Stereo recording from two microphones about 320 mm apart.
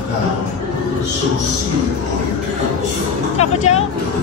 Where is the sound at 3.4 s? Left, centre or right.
Centre.